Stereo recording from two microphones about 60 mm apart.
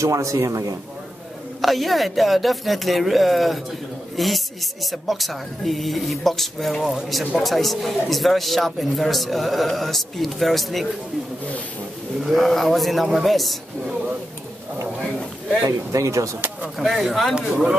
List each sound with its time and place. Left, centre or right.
0.0 s a man's voice: right
1.6 s speech: centre
12.2 s speech: centre
15.9 s a man's voice: right
16.7 s speech: centre